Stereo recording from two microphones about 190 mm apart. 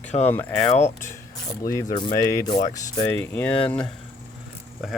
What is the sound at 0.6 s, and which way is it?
Speech, 35° left (ahead or behind).